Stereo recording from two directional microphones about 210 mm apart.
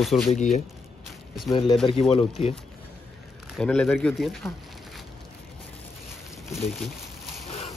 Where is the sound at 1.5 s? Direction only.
20° left (ahead or behind).